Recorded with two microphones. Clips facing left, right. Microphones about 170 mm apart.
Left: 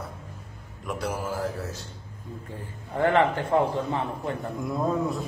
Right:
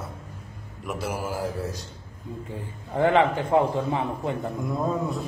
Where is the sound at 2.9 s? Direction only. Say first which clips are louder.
Right 2 dB; 15° right (ahead or behind).